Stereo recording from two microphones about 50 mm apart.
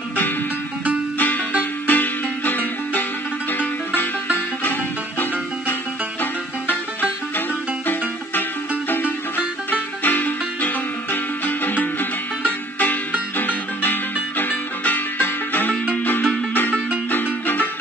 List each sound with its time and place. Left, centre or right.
1.1 s music: left
6.7 s music: left